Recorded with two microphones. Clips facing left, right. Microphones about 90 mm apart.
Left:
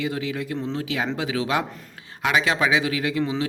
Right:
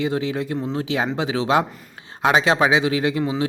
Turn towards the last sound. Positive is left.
turn(degrees=-25)  # may be behind; listen again after turning